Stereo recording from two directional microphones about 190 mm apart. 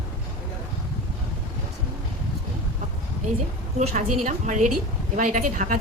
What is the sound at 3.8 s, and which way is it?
A woman's voice, 35° right (ahead or behind).